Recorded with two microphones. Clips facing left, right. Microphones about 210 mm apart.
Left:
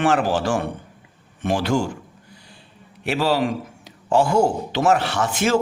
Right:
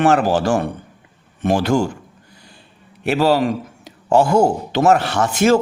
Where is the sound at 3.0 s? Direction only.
45° right (ahead or behind).